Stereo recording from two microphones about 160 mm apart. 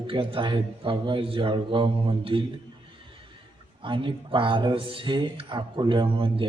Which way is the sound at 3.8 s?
30° right (ahead or behind).